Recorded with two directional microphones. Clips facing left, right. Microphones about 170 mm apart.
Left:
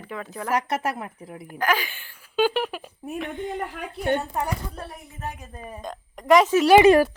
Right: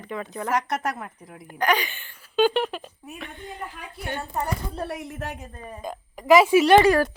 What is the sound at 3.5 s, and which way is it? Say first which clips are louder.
Speech: left 6 dB; 65° left (ahead or behind).